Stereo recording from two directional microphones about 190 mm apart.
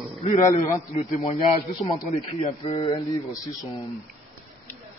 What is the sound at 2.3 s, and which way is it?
Speech, 35° left (ahead or behind).